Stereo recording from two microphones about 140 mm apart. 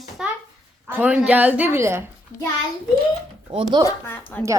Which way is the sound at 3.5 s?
45° right (ahead or behind).